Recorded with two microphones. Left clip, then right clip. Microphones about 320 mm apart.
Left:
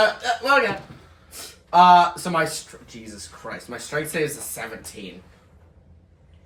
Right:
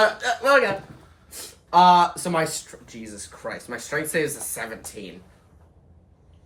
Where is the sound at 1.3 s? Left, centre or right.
Right.